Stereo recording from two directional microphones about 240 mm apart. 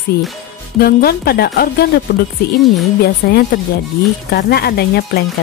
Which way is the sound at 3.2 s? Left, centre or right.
Left.